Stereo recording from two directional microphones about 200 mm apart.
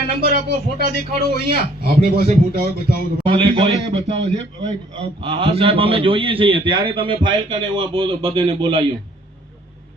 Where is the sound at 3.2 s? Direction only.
30° right (ahead or behind).